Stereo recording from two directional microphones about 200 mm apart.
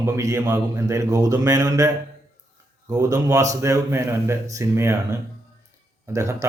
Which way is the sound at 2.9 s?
15° right (ahead or behind).